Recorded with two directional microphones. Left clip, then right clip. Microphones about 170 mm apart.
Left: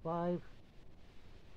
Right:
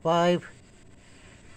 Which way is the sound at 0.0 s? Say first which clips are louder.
Right 15 dB; 15° right (ahead or behind).